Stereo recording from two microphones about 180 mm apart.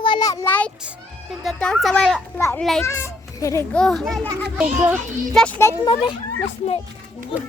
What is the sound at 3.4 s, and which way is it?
Speech, 15° left (ahead or behind).